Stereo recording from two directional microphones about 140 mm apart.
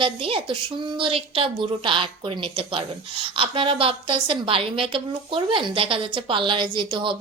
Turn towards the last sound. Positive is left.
turn(degrees=-35)  # may be behind; listen again after turning